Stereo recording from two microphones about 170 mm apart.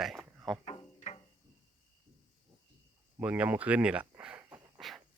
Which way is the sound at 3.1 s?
10° right (ahead or behind).